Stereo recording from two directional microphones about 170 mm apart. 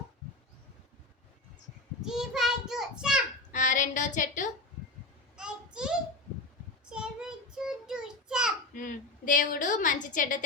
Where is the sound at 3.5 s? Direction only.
50° left (ahead or behind).